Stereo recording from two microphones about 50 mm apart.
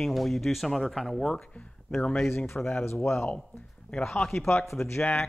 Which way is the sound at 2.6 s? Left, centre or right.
Left.